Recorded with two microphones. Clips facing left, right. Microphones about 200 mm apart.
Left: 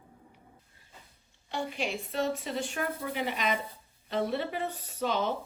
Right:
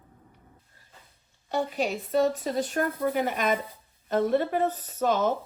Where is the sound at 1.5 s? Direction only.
45° right (ahead or behind).